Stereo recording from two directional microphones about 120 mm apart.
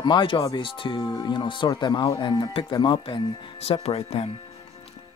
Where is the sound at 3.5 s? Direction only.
55° left (ahead or behind).